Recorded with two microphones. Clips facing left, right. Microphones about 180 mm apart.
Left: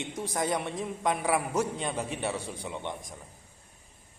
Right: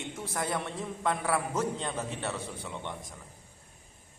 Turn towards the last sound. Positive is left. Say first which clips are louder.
# left 3 dB
turn(degrees=15)  # may be behind; listen again after turning